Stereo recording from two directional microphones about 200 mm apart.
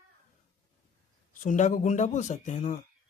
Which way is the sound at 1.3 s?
40° left (ahead or behind).